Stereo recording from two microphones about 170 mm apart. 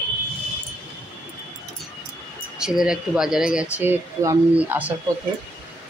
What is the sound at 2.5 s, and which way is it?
Speech, 5° right (ahead or behind).